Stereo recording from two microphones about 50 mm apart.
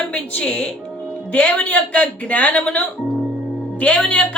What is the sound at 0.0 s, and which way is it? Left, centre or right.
Music, left.